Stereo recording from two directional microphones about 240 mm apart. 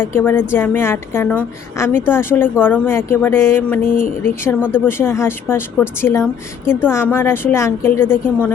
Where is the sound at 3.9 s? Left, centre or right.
Left.